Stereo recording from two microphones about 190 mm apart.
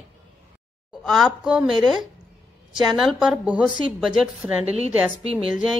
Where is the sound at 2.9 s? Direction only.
Centre (ahead or behind).